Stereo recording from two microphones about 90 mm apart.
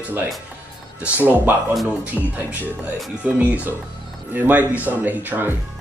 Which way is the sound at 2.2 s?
Centre (ahead or behind).